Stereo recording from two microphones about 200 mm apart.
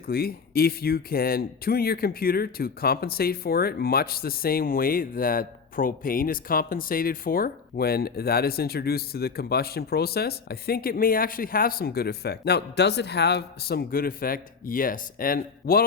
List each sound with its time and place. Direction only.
0.1 s speech: 50° left (ahead or behind)